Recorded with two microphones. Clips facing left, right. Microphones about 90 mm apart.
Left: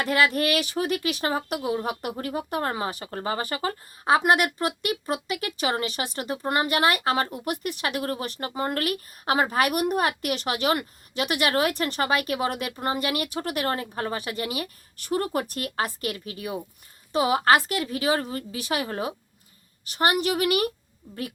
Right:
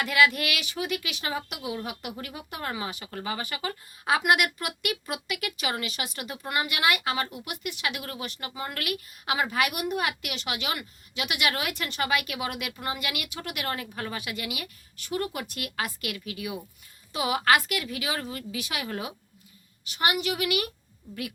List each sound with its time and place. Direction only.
0.0 s a woman's voice: 40° left (ahead or behind)